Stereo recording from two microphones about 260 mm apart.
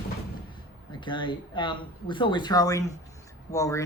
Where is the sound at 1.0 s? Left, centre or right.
Centre.